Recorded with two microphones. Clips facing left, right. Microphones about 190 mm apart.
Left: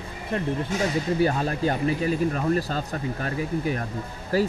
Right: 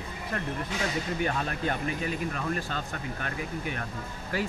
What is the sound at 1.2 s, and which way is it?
Speech, 35° left (ahead or behind).